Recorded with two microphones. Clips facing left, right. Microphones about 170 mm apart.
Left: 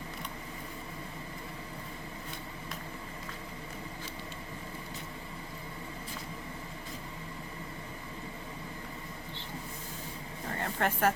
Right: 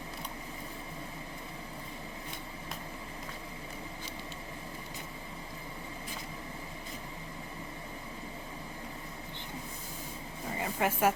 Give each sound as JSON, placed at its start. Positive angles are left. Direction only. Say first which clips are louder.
{"t": 10.5, "sound": "vehicle", "louder": "even", "side_deg": -5}